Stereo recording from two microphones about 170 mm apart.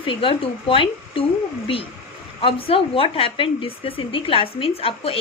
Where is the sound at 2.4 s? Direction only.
35° left (ahead or behind).